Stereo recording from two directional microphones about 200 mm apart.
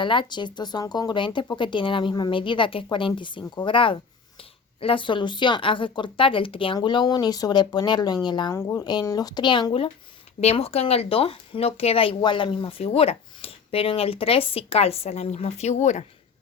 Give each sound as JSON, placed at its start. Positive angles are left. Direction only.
{"t": 0.0, "sound": "speech", "side_deg": 25}